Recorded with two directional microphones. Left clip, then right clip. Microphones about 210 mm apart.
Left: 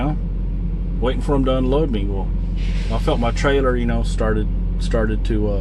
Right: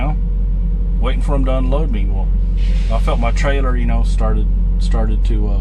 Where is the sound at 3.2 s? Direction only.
5° right (ahead or behind).